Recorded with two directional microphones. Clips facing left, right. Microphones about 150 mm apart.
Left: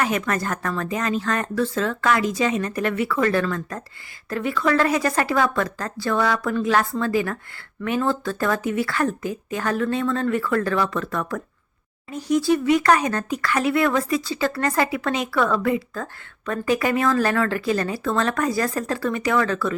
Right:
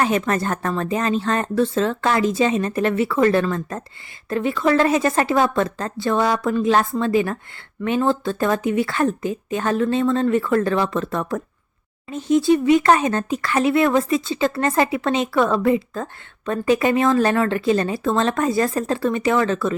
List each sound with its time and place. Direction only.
0.0 s speech: 30° right (ahead or behind)